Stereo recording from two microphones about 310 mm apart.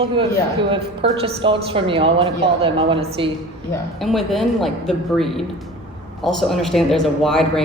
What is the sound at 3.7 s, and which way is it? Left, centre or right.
Speech, centre.